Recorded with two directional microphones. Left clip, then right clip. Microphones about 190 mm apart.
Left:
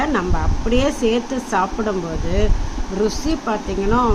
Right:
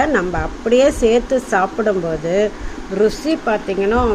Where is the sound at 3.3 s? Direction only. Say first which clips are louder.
Right 4 dB; 5° right (ahead or behind).